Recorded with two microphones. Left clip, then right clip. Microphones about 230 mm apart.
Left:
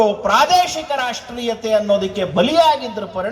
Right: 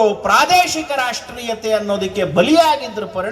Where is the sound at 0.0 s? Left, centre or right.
Right.